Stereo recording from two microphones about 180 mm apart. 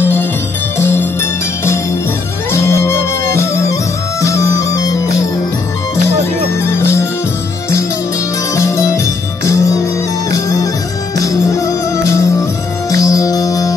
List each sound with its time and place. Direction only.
0.0 s music: 10° left (ahead or behind)
2.5 s music: 15° left (ahead or behind)
6.6 s music: 15° left (ahead or behind)
8.5 s music: 15° left (ahead or behind)